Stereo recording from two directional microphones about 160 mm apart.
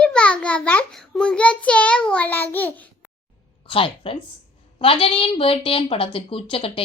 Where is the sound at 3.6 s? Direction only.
35° left (ahead or behind).